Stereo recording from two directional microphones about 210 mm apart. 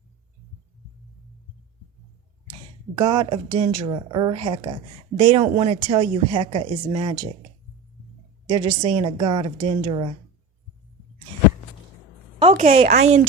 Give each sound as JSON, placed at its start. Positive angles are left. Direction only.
{"t": 3.0, "sound": "a woman's voice", "side_deg": -20}
{"t": 8.4, "sound": "a woman's voice", "side_deg": -25}
{"t": 12.7, "sound": "speech", "side_deg": -30}